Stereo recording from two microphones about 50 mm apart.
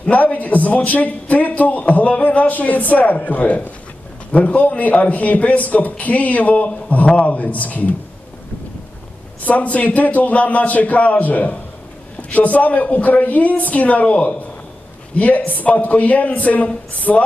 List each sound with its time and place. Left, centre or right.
0.0 s a man's voice: left
9.4 s a man's voice: left